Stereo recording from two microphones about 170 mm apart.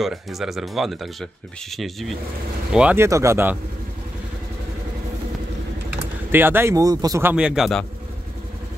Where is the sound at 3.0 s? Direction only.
15° right (ahead or behind).